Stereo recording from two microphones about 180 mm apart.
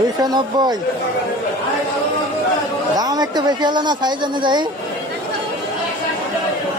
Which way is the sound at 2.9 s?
20° right (ahead or behind).